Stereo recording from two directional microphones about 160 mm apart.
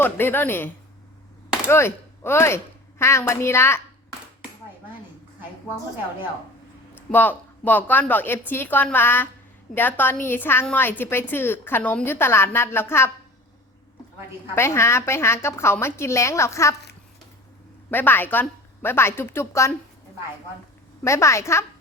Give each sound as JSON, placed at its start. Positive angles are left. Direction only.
{"t": 0.0, "sound": "a woman's voice", "side_deg": 15}
{"t": 1.7, "sound": "a woman's voice", "side_deg": 15}
{"t": 6.9, "sound": "a woman's voice", "side_deg": 10}
{"t": 14.5, "sound": "a woman's voice", "side_deg": 15}
{"t": 17.9, "sound": "a woman's voice", "side_deg": 10}
{"t": 21.0, "sound": "a woman's voice", "side_deg": 20}